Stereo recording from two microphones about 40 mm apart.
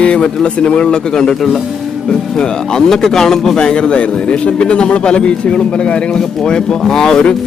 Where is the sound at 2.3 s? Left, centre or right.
Centre.